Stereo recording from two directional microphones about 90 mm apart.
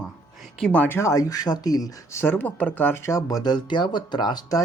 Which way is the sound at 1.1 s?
40° left (ahead or behind).